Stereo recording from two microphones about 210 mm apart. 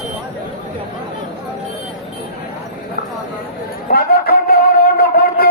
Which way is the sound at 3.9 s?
45° left (ahead or behind).